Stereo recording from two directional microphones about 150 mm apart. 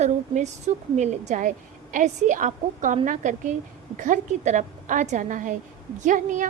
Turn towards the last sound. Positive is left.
turn(degrees=-60)  # may be behind; listen again after turning